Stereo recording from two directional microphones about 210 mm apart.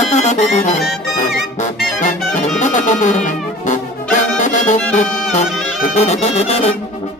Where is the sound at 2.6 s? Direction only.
35° left (ahead or behind).